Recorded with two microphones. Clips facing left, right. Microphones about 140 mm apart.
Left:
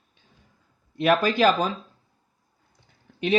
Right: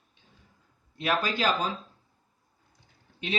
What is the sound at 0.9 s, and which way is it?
Speech, 60° left (ahead or behind).